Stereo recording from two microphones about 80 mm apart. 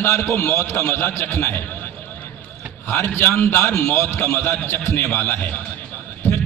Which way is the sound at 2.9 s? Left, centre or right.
Left.